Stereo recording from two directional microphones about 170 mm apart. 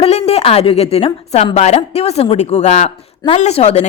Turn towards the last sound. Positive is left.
turn(degrees=35)  # may be behind; listen again after turning